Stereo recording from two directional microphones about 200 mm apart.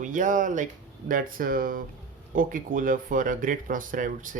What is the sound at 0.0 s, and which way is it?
Speech, 40° right (ahead or behind).